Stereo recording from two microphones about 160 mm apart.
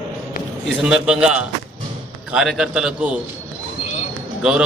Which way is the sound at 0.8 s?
5° right (ahead or behind).